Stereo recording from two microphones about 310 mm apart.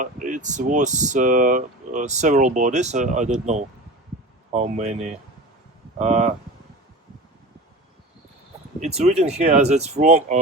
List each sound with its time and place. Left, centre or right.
0.0 s speech: right
8.8 s speech: right